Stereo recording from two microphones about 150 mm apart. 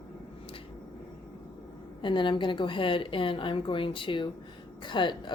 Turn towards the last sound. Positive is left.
turn(degrees=30)  # may be behind; listen again after turning